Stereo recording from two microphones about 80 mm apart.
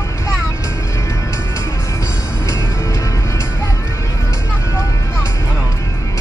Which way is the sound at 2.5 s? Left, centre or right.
Left.